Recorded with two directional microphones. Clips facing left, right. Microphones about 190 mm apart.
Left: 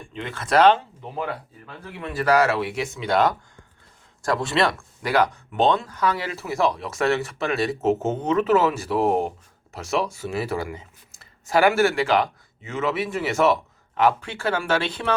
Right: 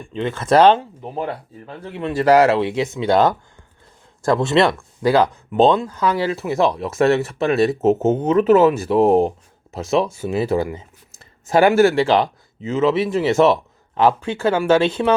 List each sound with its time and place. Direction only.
0.2 s speech: 25° right (ahead or behind)